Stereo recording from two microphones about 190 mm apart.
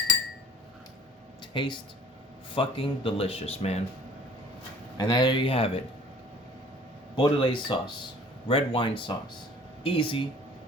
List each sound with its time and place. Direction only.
1.5 s speech: 25° left (ahead or behind)
4.9 s speech: 20° left (ahead or behind)
7.2 s speech: 25° left (ahead or behind)